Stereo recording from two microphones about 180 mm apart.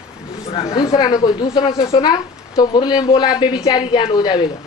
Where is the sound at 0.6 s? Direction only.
20° left (ahead or behind).